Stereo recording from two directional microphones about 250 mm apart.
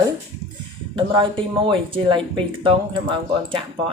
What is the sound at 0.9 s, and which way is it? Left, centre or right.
Speech, centre.